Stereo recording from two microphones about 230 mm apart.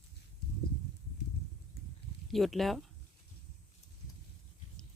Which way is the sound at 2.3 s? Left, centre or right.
Centre.